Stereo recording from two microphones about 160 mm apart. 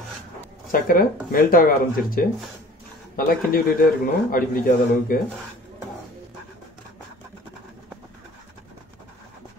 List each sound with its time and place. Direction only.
0.7 s a man's voice: 60° left (ahead or behind)